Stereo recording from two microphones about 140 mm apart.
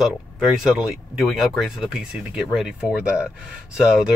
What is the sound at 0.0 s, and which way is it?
Speech, 5° right (ahead or behind).